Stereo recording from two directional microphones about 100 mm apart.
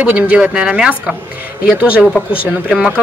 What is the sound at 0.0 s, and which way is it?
Speech, 15° right (ahead or behind).